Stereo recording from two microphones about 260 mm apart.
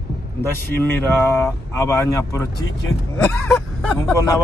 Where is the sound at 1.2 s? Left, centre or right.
Centre.